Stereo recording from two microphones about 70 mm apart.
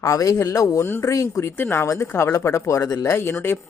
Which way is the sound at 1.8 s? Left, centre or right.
Left.